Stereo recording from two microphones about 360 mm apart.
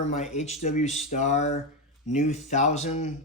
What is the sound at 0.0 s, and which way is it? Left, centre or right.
Speech, centre.